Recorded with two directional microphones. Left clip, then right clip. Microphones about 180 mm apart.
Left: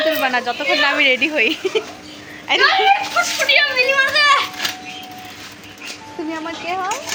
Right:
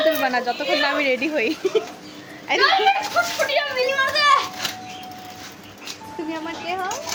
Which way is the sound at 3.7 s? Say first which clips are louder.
Left 5 dB; 20° right (ahead or behind).